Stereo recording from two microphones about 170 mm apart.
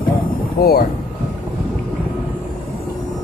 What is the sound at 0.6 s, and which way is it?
Speech, 65° left (ahead or behind).